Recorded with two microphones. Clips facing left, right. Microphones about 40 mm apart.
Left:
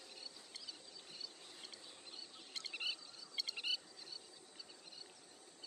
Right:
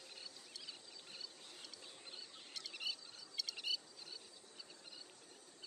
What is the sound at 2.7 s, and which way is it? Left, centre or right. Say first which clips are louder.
Rodents: left 2 dB; left.